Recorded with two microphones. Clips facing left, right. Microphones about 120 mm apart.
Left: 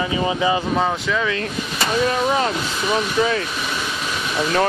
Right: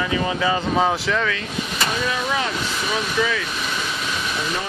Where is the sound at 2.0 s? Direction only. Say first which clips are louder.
Left 5 dB; 35° left (ahead or behind).